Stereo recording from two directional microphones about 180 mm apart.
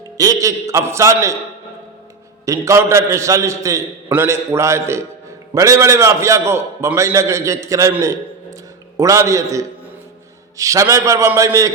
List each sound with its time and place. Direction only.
0.2 s a man's voice: 20° right (ahead or behind)
2.5 s a man's voice: 15° right (ahead or behind)